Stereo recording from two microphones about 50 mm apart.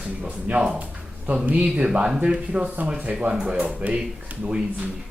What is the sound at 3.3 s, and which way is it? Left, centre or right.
Speech, centre.